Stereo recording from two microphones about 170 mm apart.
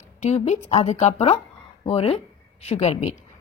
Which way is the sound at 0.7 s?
40° left (ahead or behind).